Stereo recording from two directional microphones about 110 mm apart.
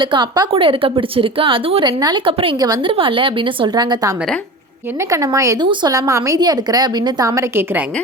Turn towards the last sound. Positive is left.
turn(degrees=-30)  # may be behind; listen again after turning